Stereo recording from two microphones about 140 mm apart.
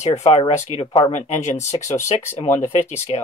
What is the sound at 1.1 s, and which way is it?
Speech, 55° left (ahead or behind).